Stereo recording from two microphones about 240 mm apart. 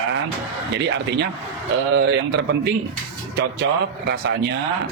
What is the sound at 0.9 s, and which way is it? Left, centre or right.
A man's voice, right.